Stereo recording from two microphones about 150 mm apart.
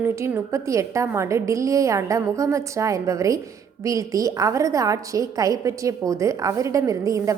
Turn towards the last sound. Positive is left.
turn(degrees=-20)  # may be behind; listen again after turning